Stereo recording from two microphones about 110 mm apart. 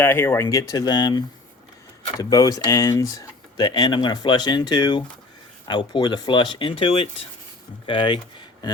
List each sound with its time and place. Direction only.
0.0 s speech: 20° left (ahead or behind)
0.5 s speech: 35° left (ahead or behind); by 7.3 s 60° left (ahead or behind)
7.9 s speech: 50° left (ahead or behind)